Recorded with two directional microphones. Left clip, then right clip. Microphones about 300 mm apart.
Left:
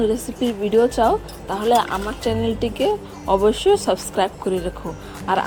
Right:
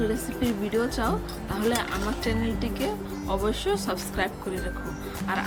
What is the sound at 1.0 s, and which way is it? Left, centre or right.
Speech, left.